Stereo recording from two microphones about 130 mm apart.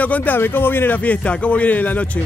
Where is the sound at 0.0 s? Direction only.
10° left (ahead or behind).